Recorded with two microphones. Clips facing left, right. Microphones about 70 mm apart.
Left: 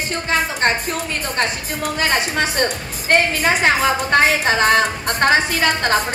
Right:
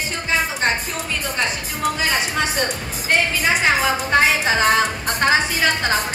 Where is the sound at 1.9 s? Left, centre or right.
Left.